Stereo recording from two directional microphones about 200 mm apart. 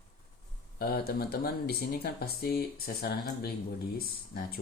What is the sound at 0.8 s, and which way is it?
Speech, 50° left (ahead or behind).